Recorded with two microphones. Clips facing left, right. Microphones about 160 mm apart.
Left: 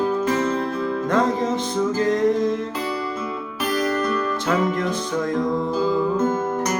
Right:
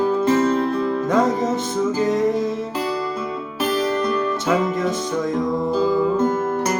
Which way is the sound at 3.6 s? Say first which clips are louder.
Right 2 dB; 30° right (ahead or behind).